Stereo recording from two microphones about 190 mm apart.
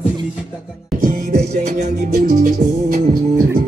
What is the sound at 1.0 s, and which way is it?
Music, 45° right (ahead or behind).